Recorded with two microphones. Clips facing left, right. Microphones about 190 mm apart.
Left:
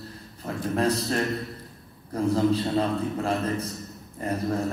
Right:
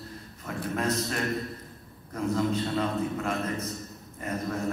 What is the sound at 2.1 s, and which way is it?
A man's voice, 35° left (ahead or behind).